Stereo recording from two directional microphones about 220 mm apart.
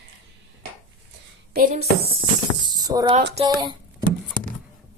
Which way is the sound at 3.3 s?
25° right (ahead or behind).